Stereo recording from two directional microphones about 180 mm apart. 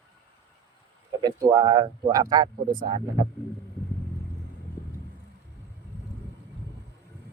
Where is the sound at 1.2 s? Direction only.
20° right (ahead or behind).